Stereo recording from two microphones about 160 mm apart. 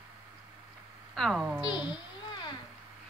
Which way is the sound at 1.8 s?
30° left (ahead or behind).